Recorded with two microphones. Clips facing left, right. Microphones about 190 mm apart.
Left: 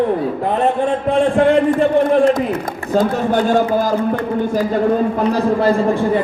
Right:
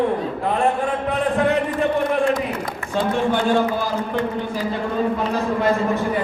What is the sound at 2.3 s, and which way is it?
A man's voice, 40° left (ahead or behind).